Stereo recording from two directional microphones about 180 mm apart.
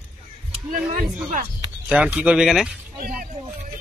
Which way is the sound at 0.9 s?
50° right (ahead or behind).